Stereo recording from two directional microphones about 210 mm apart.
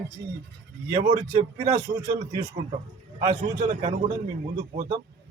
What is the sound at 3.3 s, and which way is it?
Speech, 40° right (ahead or behind).